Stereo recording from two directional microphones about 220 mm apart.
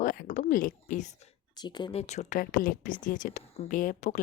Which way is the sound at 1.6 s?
20° left (ahead or behind).